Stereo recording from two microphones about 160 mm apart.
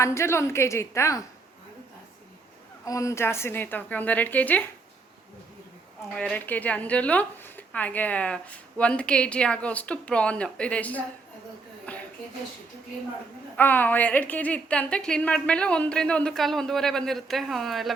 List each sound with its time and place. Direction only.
0.0 s a woman's voice: 15° left (ahead or behind)
2.8 s a woman's voice: 20° left (ahead or behind)
6.1 s a woman's voice: 5° left (ahead or behind)
11.9 s a sound: 10° left (ahead or behind)
13.6 s a woman's voice: 10° left (ahead or behind)